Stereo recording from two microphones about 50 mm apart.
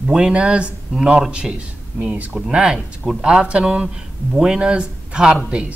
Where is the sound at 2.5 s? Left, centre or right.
Centre.